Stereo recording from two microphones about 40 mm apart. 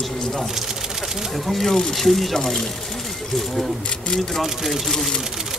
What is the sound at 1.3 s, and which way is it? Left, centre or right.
Speech, centre.